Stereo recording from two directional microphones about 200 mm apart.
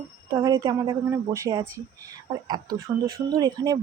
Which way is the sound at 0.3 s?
15° right (ahead or behind).